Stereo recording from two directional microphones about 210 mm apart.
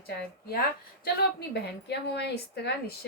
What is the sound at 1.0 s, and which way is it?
A woman's voice, 50° left (ahead or behind).